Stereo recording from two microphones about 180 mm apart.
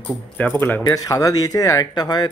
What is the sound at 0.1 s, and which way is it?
Speech, 10° left (ahead or behind).